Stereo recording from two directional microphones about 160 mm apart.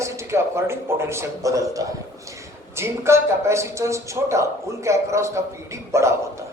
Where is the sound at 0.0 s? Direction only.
15° right (ahead or behind).